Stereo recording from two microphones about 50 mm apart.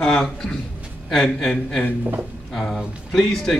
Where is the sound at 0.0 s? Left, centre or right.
Centre.